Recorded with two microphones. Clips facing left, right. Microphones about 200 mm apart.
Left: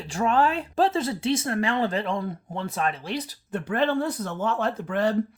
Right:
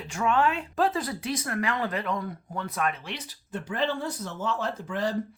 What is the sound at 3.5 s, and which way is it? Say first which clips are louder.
Speech: left 5 dB; 60° left (ahead or behind).